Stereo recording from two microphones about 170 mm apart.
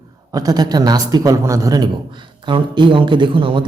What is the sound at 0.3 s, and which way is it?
A man's voice, 20° right (ahead or behind).